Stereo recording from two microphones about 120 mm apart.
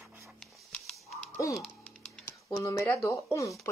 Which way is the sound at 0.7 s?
5° left (ahead or behind).